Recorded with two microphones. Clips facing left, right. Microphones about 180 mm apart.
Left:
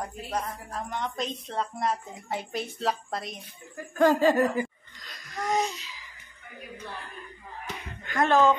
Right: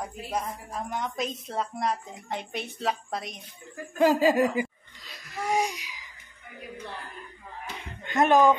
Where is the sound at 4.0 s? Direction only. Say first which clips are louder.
Even; 5° right (ahead or behind).